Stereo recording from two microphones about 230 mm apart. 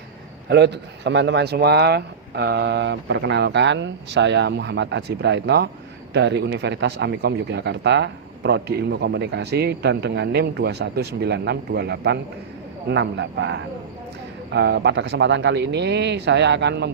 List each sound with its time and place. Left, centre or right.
0.4 s speech: right